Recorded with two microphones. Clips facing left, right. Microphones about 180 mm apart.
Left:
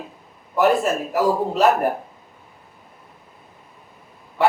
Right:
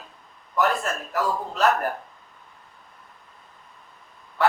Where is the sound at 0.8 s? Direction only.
5° left (ahead or behind).